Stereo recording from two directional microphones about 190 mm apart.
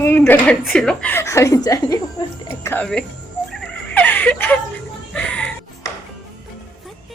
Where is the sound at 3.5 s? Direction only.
10° left (ahead or behind).